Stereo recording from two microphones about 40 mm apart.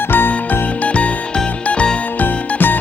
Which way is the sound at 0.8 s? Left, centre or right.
Left.